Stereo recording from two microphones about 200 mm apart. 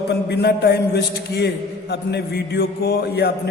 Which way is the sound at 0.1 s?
55° left (ahead or behind).